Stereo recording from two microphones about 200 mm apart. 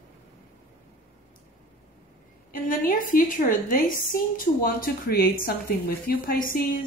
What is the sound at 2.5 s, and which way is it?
A woman's voice, 45° left (ahead or behind).